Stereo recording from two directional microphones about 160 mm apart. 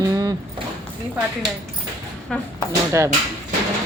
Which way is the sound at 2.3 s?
5° left (ahead or behind).